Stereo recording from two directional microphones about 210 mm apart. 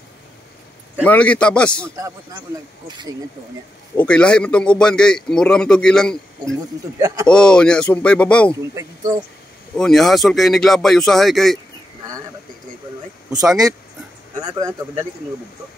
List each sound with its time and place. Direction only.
1.0 s a man's voice: 5° left (ahead or behind)
2.0 s speech: 15° right (ahead or behind)
3.9 s a man's voice: 5° left (ahead or behind)
7.0 s speech: 15° right (ahead or behind)
7.2 s a man's voice: 5° left (ahead or behind)
8.7 s speech: 15° right (ahead or behind)
9.8 s a man's voice: centre (ahead or behind)
13.5 s speech: 15° right (ahead or behind)